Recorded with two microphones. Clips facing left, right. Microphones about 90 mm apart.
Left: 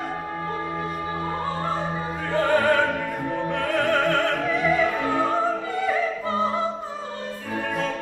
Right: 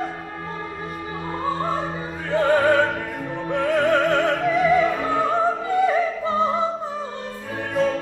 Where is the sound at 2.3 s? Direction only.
20° right (ahead or behind).